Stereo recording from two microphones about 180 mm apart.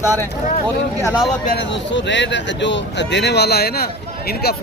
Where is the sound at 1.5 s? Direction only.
90° left; by 4.6 s 60° left (ahead or behind).